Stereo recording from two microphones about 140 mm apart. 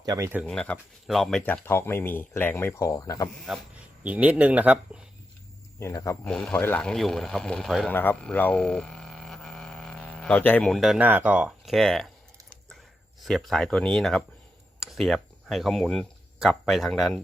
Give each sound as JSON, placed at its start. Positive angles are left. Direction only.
{"t": 0.0, "sound": "speech", "side_deg": -25}
{"t": 0.4, "sound": "speech", "side_deg": 5}
{"t": 3.5, "sound": "speech", "side_deg": -5}
{"t": 5.8, "sound": "speech", "side_deg": 20}
{"t": 6.2, "sound": "speech", "side_deg": 5}
{"t": 7.9, "sound": "a sound", "side_deg": 10}
{"t": 11.0, "sound": "speech", "side_deg": -10}
{"t": 13.2, "sound": "speech", "side_deg": 0}